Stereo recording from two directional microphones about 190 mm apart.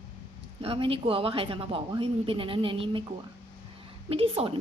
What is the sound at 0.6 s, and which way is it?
Speech, 30° right (ahead or behind).